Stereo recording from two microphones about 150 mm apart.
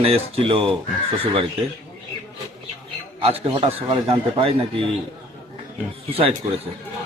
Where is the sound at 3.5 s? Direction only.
35° right (ahead or behind).